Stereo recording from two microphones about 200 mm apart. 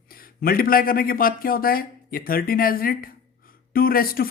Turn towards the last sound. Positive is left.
turn(degrees=45)  # may be behind; listen again after turning